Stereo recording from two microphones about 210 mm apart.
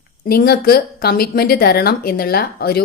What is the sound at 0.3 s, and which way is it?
A woman's voice, 50° left (ahead or behind).